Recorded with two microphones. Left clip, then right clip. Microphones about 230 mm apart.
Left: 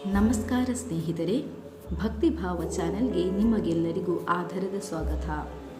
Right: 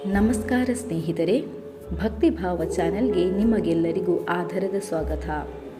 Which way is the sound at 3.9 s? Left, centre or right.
Left.